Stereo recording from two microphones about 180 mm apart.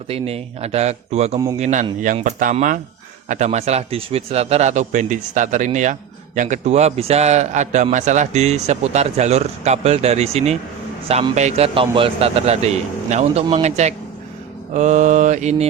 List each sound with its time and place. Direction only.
0.1 s a man's voice: 35° right (ahead or behind)